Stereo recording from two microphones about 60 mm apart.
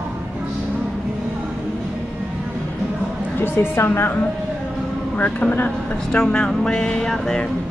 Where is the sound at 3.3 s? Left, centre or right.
Left.